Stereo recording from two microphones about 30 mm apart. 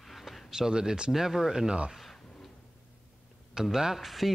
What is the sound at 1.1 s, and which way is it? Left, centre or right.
Speech, centre.